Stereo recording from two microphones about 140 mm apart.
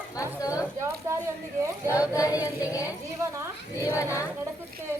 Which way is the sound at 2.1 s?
25° left (ahead or behind).